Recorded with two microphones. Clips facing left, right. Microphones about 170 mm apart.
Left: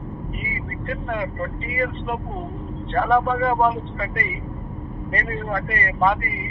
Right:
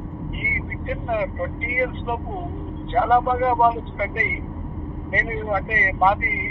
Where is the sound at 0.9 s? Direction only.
15° right (ahead or behind).